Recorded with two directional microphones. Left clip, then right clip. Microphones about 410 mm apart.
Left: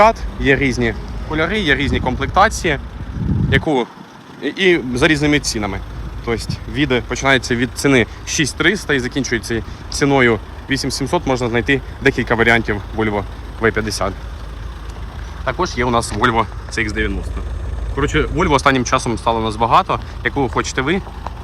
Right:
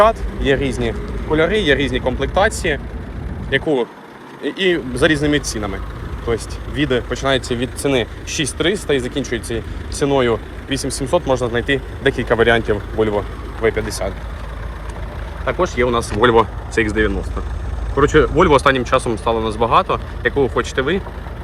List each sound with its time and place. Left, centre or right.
0.0 s speech: centre
15.4 s speech: centre